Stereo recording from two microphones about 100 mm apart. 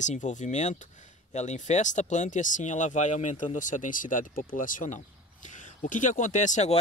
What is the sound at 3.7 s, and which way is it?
Speech, 90° left.